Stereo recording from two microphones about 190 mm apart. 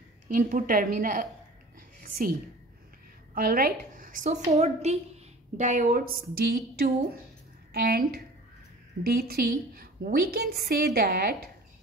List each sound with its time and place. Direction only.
0.3 s a woman's voice: 45° right (ahead or behind)
1.8 s whispering: 50° right (ahead or behind)
3.3 s a woman's voice: 50° right (ahead or behind)